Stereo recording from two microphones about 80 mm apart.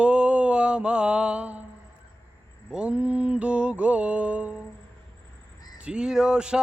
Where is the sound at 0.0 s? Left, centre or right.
Centre.